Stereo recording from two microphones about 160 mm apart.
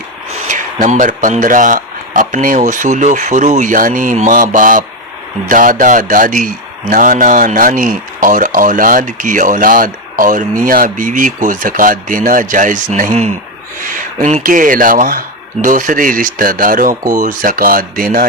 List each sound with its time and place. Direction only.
0.4 s speech: 50° right (ahead or behind)